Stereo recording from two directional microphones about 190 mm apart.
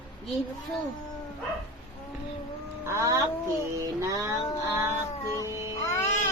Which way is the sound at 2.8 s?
15° right (ahead or behind).